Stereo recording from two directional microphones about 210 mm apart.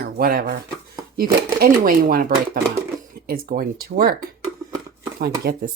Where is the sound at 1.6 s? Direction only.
45° right (ahead or behind).